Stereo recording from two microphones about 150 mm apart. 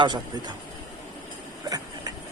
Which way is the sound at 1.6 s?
25° right (ahead or behind).